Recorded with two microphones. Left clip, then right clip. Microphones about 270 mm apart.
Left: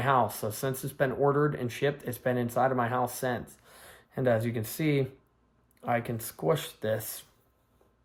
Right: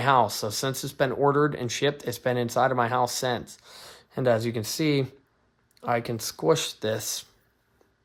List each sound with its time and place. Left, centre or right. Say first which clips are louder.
0.0 s speech: right 5 dB; right